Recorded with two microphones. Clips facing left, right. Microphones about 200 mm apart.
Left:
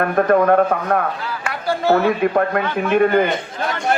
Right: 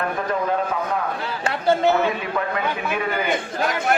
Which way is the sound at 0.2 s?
60° left (ahead or behind).